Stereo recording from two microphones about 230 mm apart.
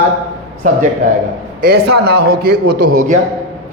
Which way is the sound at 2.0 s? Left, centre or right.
Right.